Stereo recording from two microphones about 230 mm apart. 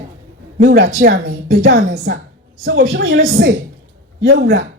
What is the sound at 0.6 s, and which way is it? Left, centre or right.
A woman's voice, right.